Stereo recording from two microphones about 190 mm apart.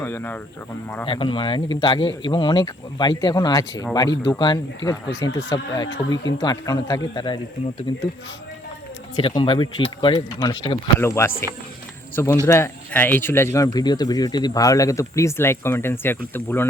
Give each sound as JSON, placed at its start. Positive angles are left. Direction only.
{"t": 0.0, "sound": "speech", "side_deg": 10}
{"t": 1.0, "sound": "speech", "side_deg": 25}
{"t": 9.1, "sound": "speech", "side_deg": 25}
{"t": 11.0, "sound": "speech", "side_deg": 15}